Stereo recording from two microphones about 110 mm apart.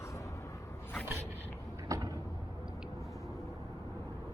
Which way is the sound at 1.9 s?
35° right (ahead or behind).